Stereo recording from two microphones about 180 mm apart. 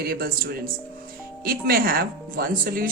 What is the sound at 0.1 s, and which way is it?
Speech, 55° right (ahead or behind).